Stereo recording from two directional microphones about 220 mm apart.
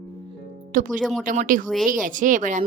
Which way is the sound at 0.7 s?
35° right (ahead or behind).